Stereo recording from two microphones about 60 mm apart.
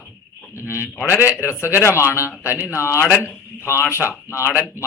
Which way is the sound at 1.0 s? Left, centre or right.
Left.